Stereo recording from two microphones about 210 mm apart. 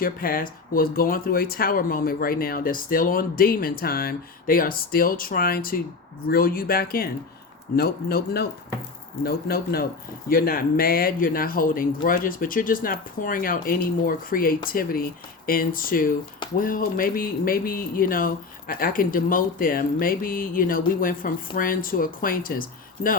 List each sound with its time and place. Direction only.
0.0 s speech: 45° left (ahead or behind)